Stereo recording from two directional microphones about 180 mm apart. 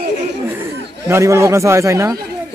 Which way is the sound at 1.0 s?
15° right (ahead or behind).